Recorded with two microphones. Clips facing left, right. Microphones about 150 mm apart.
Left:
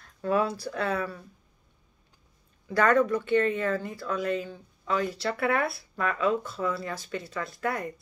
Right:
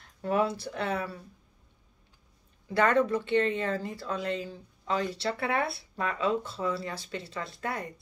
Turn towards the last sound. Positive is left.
turn(degrees=-25)  # may be behind; listen again after turning